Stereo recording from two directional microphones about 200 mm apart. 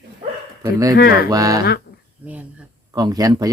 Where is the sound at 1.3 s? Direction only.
20° right (ahead or behind).